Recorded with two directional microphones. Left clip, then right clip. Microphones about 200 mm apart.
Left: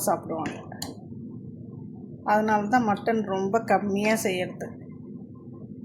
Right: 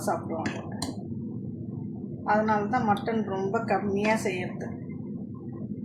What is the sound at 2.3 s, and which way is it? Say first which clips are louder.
Speech: left 3 dB; 55° left (ahead or behind).